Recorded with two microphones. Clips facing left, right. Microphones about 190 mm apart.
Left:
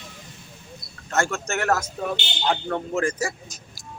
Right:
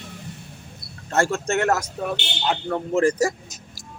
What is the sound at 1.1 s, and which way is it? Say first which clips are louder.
Speech: right 4 dB; 30° right (ahead or behind).